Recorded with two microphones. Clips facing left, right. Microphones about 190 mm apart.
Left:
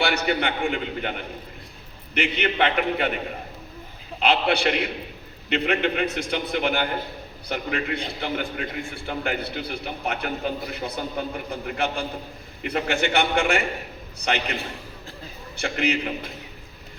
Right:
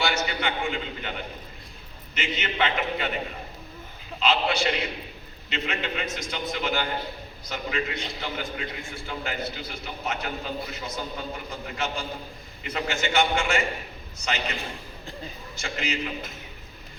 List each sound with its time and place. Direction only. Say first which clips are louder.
0.0 s a man's voice: left 4 dB; 60° left (ahead or behind)
2.1 s a man's voice: left 5 dB; 60° left (ahead or behind)
4.2 s a man's voice: left 3 dB; 60° left (ahead or behind)
15.5 s a man's voice: left 7 dB; 60° left (ahead or behind)